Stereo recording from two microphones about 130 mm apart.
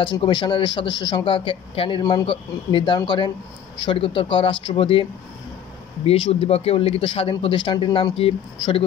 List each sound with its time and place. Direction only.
0.0 s speech: 35° left (ahead or behind)
6.0 s a man's voice: 45° left (ahead or behind)